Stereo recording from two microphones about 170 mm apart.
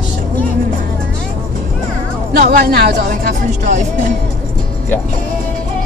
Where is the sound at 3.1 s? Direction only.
50° right (ahead or behind).